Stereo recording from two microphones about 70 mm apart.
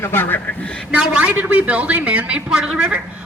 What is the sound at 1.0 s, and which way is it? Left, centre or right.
A man's voice, centre.